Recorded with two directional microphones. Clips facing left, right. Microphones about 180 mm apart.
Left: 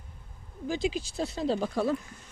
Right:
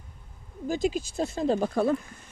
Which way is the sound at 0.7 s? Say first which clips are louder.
Right 3 dB; 45° right (ahead or behind).